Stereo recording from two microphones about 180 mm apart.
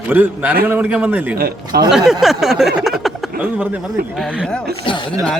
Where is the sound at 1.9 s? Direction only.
5° right (ahead or behind).